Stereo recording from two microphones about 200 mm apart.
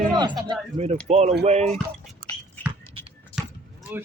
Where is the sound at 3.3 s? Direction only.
25° left (ahead or behind).